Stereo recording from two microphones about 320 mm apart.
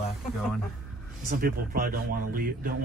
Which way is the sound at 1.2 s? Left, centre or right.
Right.